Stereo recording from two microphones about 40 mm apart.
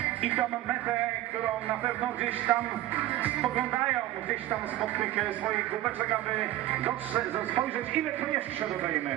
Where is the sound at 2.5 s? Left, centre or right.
Centre.